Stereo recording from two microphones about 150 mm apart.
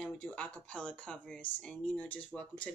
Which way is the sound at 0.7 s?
10° left (ahead or behind).